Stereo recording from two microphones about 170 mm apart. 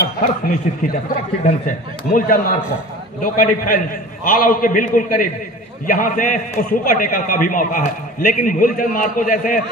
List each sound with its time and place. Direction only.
0.0 s a man's voice: 60° left (ahead or behind)